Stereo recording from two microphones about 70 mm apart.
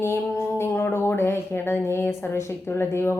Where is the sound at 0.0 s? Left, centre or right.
Left.